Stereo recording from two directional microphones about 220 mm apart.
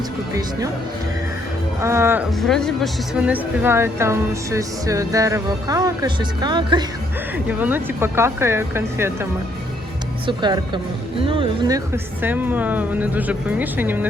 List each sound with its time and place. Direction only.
1.8 s a woman's voice: 10° right (ahead or behind)
2.4 s a woman's voice: centre (ahead or behind); by 6.8 s 20° right (ahead or behind)
7.4 s a woman's voice: 10° right (ahead or behind)
10.2 s speech: 20° right (ahead or behind)
12.2 s a woman's voice: 10° right (ahead or behind)